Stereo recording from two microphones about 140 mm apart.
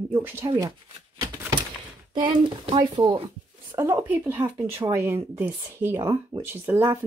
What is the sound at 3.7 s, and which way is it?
Speech, 15° right (ahead or behind).